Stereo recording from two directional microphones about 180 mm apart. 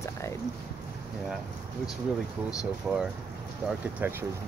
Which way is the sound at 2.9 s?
5° right (ahead or behind).